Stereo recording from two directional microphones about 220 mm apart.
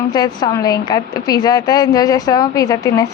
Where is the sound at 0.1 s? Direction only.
20° left (ahead or behind).